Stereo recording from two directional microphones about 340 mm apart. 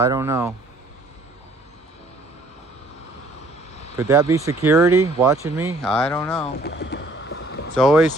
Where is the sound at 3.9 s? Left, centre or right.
Centre.